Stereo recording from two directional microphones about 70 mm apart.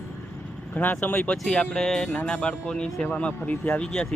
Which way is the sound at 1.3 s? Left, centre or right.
Centre.